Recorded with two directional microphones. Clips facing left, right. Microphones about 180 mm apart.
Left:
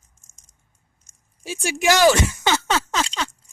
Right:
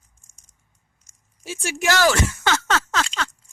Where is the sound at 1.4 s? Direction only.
15° left (ahead or behind).